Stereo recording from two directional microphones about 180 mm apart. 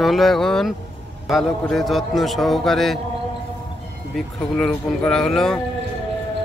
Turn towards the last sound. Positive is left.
turn(degrees=5)  # may be behind; listen again after turning